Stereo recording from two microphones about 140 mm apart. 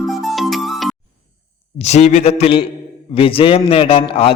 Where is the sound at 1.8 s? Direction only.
55° left (ahead or behind).